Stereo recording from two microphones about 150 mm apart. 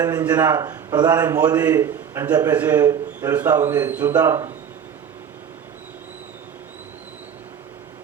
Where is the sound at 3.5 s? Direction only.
25° right (ahead or behind).